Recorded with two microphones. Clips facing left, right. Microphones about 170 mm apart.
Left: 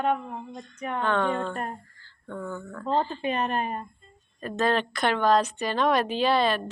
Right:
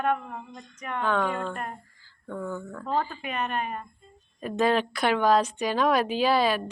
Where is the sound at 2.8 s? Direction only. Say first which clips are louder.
Left 4 dB; 25° left (ahead or behind).